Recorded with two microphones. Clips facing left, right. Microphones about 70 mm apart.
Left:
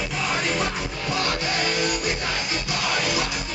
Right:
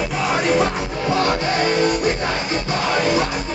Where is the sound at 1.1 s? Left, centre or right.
Right.